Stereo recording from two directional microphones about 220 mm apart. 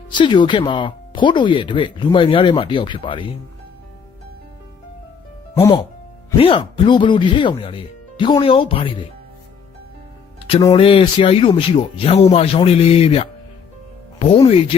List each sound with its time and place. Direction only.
0.1 s speech: 20° left (ahead or behind)
6.4 s speech: 25° left (ahead or behind)
10.7 s speech: 25° left (ahead or behind)